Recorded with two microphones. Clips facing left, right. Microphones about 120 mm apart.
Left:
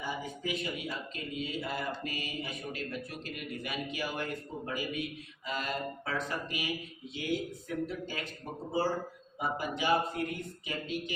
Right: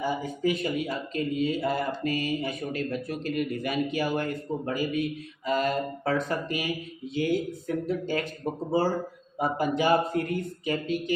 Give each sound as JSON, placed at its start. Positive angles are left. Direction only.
{"t": 0.0, "sound": "speech", "side_deg": -45}
{"t": 9.4, "sound": "speech", "side_deg": -45}